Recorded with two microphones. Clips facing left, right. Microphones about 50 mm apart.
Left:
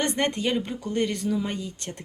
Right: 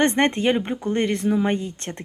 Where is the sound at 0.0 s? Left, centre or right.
Right.